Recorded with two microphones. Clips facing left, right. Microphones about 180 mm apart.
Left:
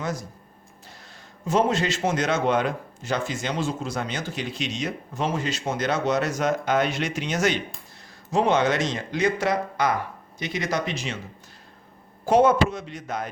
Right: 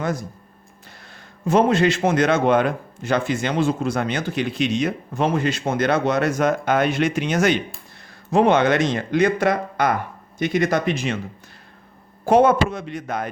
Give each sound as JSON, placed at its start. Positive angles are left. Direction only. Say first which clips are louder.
{"t": 0.0, "sound": "a man's voice", "louder": "right 5 dB", "side_deg": -55}
{"t": 1.5, "sound": "a man's voice", "louder": "right 6 dB", "side_deg": -60}
{"t": 12.2, "sound": "a man's voice", "louder": "right 3 dB", "side_deg": -55}